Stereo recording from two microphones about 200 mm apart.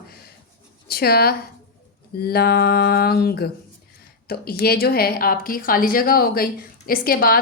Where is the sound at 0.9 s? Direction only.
50° left (ahead or behind).